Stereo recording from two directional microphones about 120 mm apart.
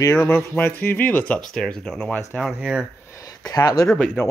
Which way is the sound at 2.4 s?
5° right (ahead or behind).